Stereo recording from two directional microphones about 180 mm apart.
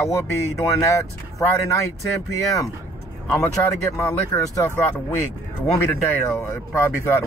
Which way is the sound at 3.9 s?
15° left (ahead or behind).